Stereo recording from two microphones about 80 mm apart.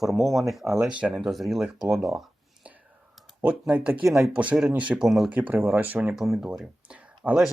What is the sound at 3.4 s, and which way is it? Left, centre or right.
Speech, centre.